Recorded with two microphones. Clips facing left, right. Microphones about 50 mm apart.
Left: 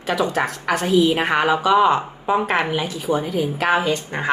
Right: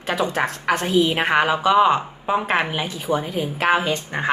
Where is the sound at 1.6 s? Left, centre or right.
Centre.